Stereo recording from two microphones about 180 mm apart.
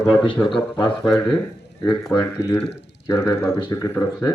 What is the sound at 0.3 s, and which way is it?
Speech, 5° left (ahead or behind).